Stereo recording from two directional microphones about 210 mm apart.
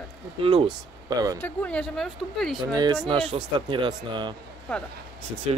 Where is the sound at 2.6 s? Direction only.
20° right (ahead or behind).